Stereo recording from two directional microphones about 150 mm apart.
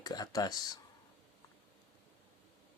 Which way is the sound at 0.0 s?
25° left (ahead or behind).